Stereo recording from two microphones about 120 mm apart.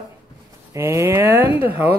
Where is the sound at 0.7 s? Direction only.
25° right (ahead or behind).